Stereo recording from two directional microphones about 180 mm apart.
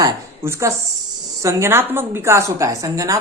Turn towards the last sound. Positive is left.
turn(degrees=-15)  # may be behind; listen again after turning